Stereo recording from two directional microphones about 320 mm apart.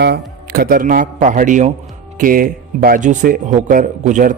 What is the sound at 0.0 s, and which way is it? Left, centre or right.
Speech, right.